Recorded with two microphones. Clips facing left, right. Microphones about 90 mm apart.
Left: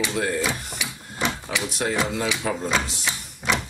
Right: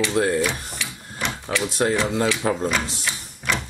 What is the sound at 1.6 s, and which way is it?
Speech, 30° right (ahead or behind).